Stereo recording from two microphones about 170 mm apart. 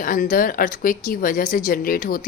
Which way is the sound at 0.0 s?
50° left (ahead or behind).